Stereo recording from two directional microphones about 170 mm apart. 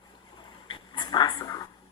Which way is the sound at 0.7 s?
25° left (ahead or behind).